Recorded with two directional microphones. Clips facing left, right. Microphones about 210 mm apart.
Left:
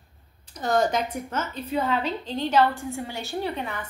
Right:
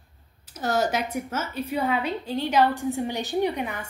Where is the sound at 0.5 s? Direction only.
5° right (ahead or behind).